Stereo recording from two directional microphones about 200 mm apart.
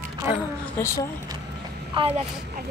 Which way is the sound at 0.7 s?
15° left (ahead or behind).